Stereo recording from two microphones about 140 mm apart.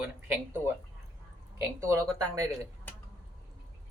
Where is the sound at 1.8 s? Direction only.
20° right (ahead or behind).